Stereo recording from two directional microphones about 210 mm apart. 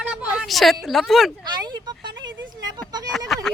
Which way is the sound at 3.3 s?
Centre (ahead or behind).